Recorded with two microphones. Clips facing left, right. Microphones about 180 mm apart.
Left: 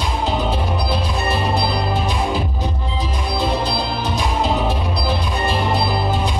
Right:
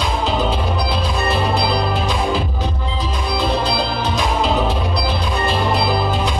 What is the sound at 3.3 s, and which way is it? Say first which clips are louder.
Music: right 2 dB; 90° right.